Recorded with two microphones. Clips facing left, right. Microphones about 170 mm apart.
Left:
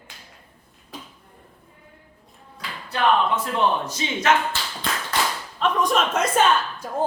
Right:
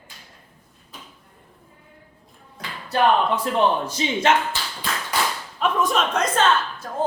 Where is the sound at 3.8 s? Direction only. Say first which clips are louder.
Right 4 dB; 30° right (ahead or behind).